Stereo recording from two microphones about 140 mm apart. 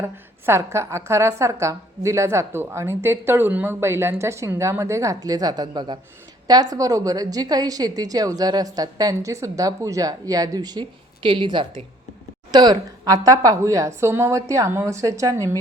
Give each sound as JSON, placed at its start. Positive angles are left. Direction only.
{"t": 0.0, "sound": "a woman's voice", "side_deg": -20}